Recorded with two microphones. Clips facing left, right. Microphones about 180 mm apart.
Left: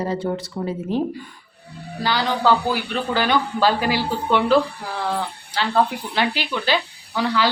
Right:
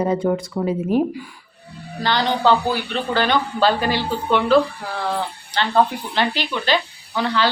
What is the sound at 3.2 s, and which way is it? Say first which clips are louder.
Speech: right 1 dB; 10° left (ahead or behind).